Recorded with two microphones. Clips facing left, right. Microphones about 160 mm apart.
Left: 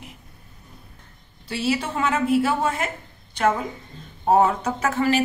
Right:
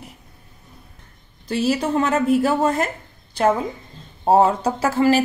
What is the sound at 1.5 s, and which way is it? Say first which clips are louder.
A woman's voice: right 5 dB; 40° right (ahead or behind).